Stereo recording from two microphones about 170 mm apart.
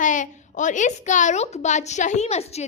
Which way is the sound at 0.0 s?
50° left (ahead or behind).